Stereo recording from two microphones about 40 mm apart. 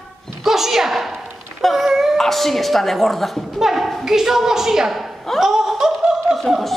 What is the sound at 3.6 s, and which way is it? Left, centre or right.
A woman's voice, centre.